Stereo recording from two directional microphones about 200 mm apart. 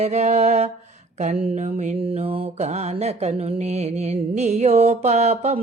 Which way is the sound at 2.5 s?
35° right (ahead or behind).